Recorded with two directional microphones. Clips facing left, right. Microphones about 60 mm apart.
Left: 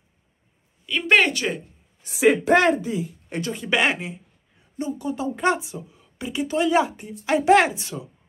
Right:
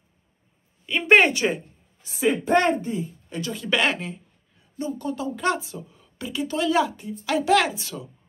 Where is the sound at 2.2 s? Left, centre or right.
Left.